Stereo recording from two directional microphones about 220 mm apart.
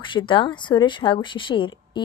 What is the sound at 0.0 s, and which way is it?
A woman's voice, 20° left (ahead or behind).